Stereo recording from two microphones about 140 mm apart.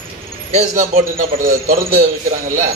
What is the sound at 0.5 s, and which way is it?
Speech, 55° right (ahead or behind).